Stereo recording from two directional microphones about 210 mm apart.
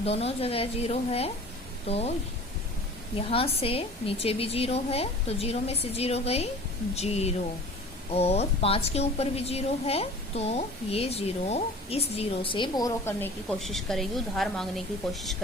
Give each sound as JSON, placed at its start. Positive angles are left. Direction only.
{"t": 0.0, "sound": "a woman's voice", "side_deg": 30}
{"t": 3.2, "sound": "a woman's voice", "side_deg": 25}